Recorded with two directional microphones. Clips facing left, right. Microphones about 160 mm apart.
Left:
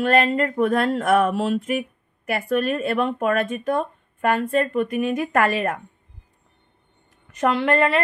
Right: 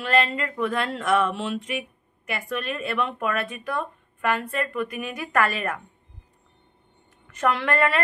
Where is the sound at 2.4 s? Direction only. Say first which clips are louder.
Left 8 dB; 35° left (ahead or behind).